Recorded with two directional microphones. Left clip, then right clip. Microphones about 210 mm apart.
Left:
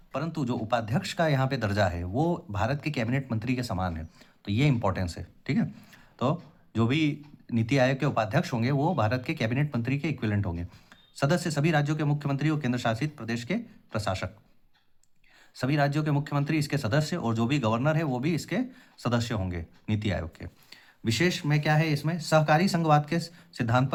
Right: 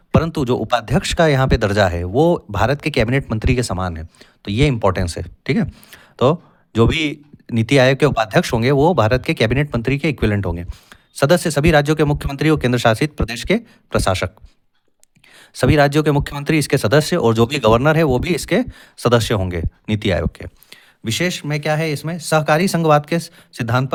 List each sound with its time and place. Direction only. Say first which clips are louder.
0.1 s speech: right 14 dB; 50° right (ahead or behind)
15.4 s speech: right 13 dB; 50° right (ahead or behind)